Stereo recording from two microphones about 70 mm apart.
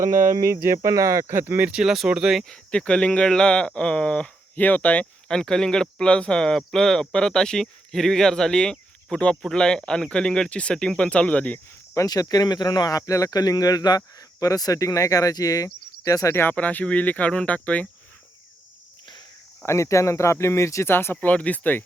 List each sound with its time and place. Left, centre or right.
0.4 s speech: right
1.3 s speech: right
1.6 s speech: centre
2.4 s speech: centre
4.5 s speech: left
5.3 s speech: centre
12.0 s speech: left
14.3 s speech: left
16.3 s speech: left
16.6 s speech: left
19.6 s speech: left
20.9 s speech: left
21.2 s speech: left